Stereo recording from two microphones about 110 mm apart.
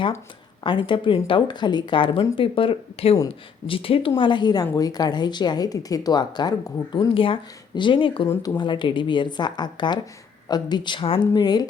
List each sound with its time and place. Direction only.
0.6 s speech: 50° left (ahead or behind)
4.2 s speech: 45° left (ahead or behind)
7.1 s speech: 55° left (ahead or behind)
8.4 s speech: 40° left (ahead or behind)